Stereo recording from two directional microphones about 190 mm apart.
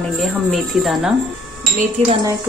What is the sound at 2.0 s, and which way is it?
Speech, 35° right (ahead or behind).